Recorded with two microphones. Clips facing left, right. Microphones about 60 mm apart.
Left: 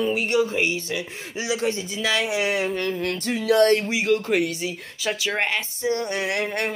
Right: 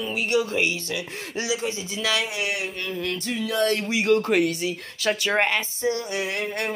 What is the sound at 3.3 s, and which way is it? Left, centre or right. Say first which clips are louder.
Speech: left 7 dB; left.